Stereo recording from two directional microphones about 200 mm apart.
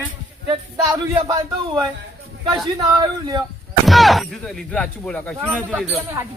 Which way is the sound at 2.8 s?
20° right (ahead or behind).